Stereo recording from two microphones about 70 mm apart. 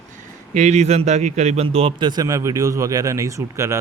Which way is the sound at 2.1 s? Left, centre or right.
Right.